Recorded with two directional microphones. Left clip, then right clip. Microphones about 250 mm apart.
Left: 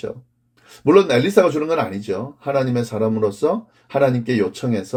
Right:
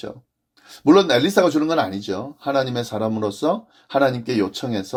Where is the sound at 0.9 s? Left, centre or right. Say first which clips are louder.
Left 1 dB; right.